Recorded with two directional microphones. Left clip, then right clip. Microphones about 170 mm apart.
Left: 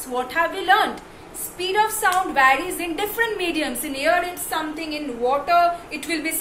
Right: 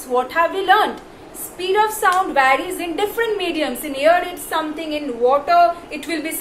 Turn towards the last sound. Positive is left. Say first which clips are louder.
# right 1 dB
turn(degrees=15)  # may be behind; listen again after turning